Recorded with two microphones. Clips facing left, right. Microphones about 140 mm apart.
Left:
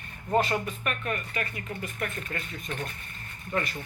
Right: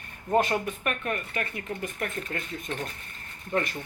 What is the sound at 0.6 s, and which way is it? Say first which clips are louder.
Speech: right 2 dB; 50° right (ahead or behind).